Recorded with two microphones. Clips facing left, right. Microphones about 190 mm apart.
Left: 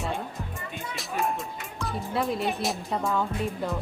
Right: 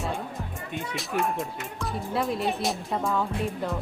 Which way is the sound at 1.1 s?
70° right (ahead or behind).